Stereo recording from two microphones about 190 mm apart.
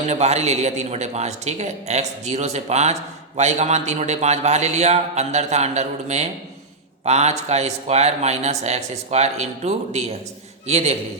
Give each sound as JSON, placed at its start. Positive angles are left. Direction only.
{"t": 0.1, "sound": "a man's voice", "side_deg": -35}